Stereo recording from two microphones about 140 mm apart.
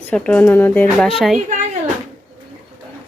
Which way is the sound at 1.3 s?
55° right (ahead or behind).